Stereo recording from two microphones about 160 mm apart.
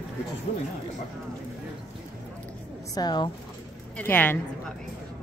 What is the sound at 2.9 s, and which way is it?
Speech, 25° left (ahead or behind).